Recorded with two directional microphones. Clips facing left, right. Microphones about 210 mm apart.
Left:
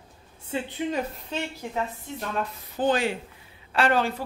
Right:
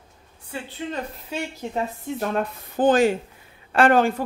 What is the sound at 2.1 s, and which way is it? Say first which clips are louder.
Speech: right 5 dB; 55° right (ahead or behind).